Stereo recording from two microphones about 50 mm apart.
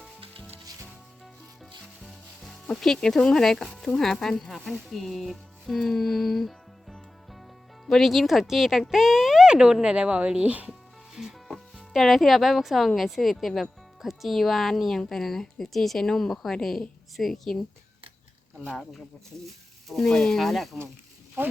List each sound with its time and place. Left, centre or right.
1.8 s music: centre
3.8 s speech: centre
4.9 s music: centre
7.9 s speech: centre
8.9 s a sound: centre
9.5 s speech: centre
10.7 s music: centre
11.9 s speech: centre
19.9 s speech: centre